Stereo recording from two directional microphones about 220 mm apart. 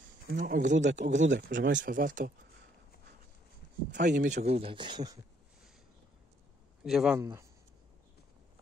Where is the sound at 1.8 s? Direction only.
35° right (ahead or behind).